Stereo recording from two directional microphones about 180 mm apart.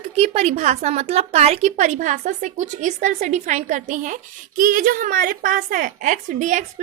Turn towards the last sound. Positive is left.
turn(degrees=-45)  # may be behind; listen again after turning